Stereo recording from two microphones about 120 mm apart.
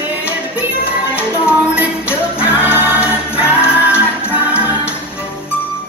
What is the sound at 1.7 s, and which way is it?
Music, 10° right (ahead or behind).